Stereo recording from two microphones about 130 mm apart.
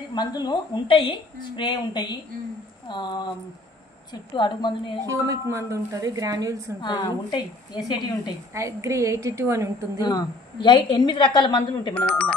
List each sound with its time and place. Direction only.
0.1 s a woman's voice: 35° left (ahead or behind)
5.0 s a woman's voice: 25° right (ahead or behind)
6.8 s a woman's voice: 35° left (ahead or behind)
8.5 s a woman's voice: 25° right (ahead or behind)
9.9 s a woman's voice: 30° left (ahead or behind)
11.9 s speech: 10° left (ahead or behind)